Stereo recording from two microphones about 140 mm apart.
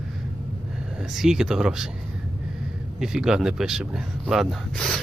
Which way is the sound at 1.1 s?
5° right (ahead or behind).